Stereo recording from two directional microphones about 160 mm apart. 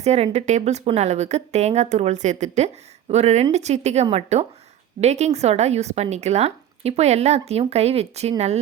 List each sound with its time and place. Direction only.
0.0 s speech: 40° right (ahead or behind)